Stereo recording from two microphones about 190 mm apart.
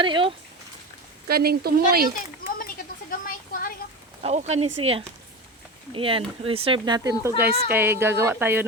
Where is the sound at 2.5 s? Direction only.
45° left (ahead or behind).